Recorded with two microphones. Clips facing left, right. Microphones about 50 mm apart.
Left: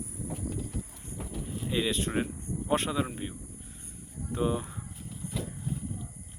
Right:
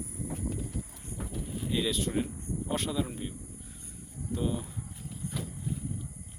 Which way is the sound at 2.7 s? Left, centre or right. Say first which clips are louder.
Left 4 dB; left.